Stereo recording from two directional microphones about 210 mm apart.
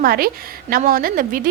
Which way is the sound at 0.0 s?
45° right (ahead or behind).